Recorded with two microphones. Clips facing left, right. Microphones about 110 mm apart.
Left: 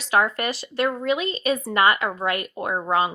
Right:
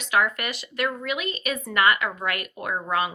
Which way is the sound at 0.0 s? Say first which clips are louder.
Left 3 dB; 30° left (ahead or behind).